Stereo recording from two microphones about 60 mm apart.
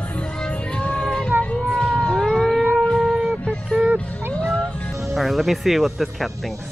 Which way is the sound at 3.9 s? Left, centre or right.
Centre.